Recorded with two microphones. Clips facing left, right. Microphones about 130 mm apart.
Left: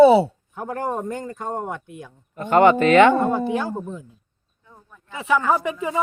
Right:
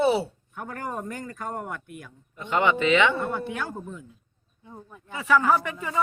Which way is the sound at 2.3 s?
50° left (ahead or behind).